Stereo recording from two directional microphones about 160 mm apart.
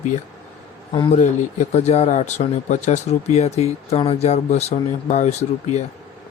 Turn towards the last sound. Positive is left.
turn(degrees=45)  # may be behind; listen again after turning